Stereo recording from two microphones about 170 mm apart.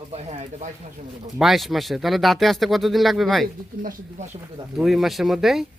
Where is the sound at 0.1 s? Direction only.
40° right (ahead or behind).